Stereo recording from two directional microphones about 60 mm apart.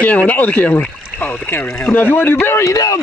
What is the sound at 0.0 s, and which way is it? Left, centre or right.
Speech, left.